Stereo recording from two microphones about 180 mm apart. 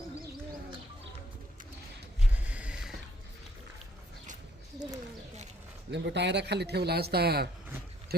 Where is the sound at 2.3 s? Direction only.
10° right (ahead or behind).